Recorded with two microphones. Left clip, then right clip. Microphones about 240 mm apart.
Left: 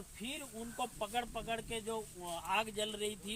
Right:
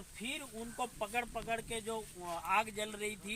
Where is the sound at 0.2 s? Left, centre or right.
Centre.